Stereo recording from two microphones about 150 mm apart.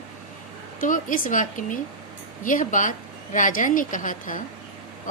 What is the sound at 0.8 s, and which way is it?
A woman's voice, 60° left (ahead or behind).